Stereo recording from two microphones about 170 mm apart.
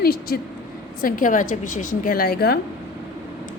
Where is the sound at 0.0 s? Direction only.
65° left (ahead or behind).